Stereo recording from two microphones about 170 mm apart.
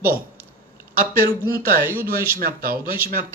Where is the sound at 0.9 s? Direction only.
60° right (ahead or behind).